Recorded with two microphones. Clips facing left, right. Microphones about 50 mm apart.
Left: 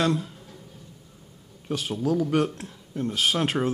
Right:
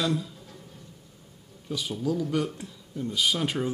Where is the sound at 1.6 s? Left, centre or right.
Left.